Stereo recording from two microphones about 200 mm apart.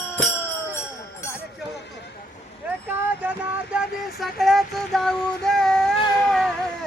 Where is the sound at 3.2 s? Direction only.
5° right (ahead or behind).